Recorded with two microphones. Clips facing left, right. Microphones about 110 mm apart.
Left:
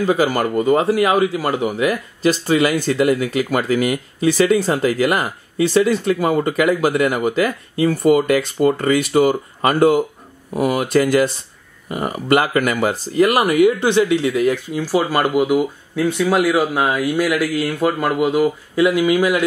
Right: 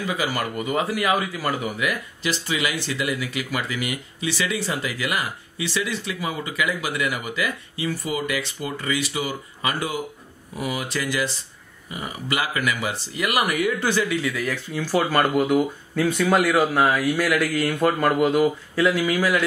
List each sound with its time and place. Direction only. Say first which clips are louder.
0.0 s speech: left 9 dB; 40° left (ahead or behind); by 14.6 s 20° left (ahead or behind)
14.9 s speech: left 3 dB; 5° left (ahead or behind)
18.8 s speech: left 6 dB; 15° left (ahead or behind)